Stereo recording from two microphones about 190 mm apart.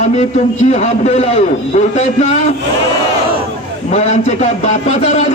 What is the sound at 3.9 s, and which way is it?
Speech, 35° left (ahead or behind).